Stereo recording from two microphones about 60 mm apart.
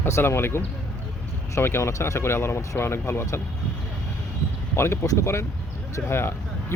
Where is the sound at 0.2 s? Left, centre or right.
Left.